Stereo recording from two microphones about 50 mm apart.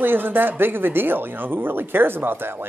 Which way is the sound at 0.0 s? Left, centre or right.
Right.